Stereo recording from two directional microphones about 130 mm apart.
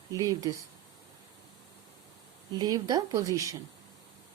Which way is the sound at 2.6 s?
30° right (ahead or behind).